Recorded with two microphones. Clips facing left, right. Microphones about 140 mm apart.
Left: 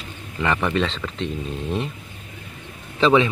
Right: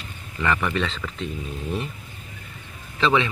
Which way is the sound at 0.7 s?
25° left (ahead or behind).